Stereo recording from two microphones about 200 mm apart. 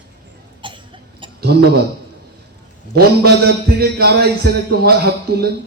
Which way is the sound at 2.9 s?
50° right (ahead or behind).